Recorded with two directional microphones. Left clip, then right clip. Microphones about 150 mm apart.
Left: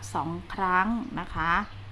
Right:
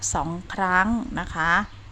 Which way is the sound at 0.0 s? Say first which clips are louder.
Right 4 dB; 55° right (ahead or behind).